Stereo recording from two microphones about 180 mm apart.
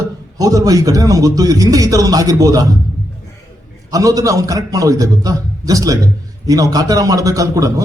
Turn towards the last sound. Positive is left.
turn(degrees=-20)  # may be behind; listen again after turning